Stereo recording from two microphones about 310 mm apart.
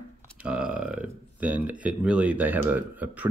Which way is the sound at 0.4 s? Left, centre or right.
Centre.